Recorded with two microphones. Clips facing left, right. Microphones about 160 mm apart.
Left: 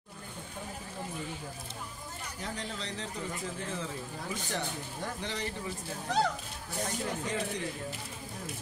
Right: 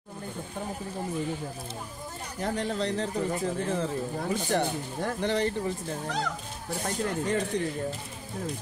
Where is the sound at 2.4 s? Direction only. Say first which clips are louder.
Right 11 dB; 55° right (ahead or behind).